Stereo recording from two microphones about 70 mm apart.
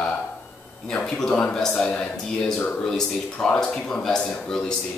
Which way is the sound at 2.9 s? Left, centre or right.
Centre.